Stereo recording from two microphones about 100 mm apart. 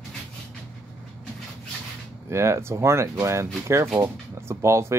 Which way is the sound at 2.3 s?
30° right (ahead or behind).